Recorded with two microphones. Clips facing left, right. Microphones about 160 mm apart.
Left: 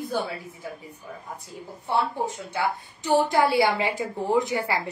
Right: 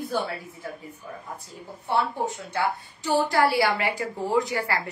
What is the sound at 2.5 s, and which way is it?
A woman's voice, 15° left (ahead or behind).